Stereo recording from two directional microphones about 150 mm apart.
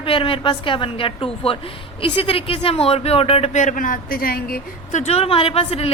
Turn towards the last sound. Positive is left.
turn(degrees=40)  # may be behind; listen again after turning